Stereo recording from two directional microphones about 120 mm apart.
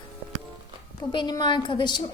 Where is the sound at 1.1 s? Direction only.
40° left (ahead or behind).